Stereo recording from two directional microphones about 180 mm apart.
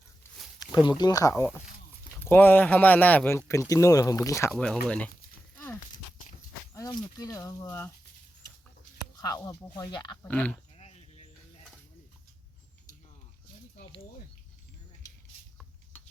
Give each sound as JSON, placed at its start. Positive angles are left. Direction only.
{"t": 0.6, "sound": "speech", "side_deg": 25}
{"t": 4.5, "sound": "speech", "side_deg": 5}
{"t": 6.7, "sound": "speech", "side_deg": 20}
{"t": 9.2, "sound": "speech", "side_deg": 20}
{"t": 10.2, "sound": "speech", "side_deg": 10}
{"t": 10.8, "sound": "a sound", "side_deg": 35}